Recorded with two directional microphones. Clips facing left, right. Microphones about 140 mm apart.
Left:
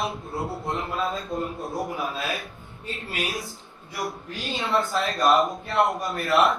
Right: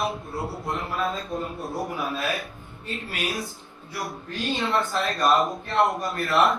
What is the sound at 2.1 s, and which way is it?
Speech, 25° left (ahead or behind).